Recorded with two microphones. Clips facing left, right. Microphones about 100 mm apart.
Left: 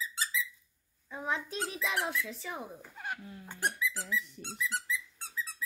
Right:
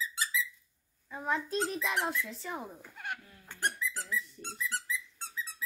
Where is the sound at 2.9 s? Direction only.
25° left (ahead or behind).